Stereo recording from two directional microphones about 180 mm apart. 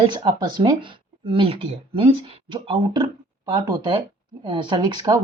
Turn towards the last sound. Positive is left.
turn(degrees=-20)  # may be behind; listen again after turning